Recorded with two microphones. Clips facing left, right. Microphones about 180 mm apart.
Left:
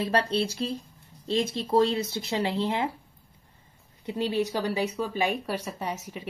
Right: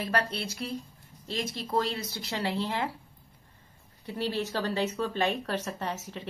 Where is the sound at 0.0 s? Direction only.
25° left (ahead or behind).